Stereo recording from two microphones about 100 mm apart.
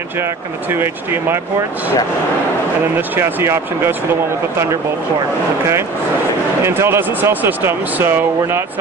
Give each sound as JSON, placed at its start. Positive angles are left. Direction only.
{"t": 0.2, "sound": "speech", "side_deg": -20}
{"t": 3.0, "sound": "speech", "side_deg": -20}
{"t": 6.6, "sound": "speech", "side_deg": -25}